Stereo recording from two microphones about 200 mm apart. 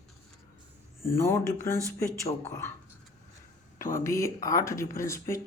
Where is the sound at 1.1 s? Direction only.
15° left (ahead or behind).